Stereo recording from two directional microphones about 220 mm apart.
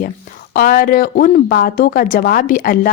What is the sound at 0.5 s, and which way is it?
A woman's voice, 45° left (ahead or behind).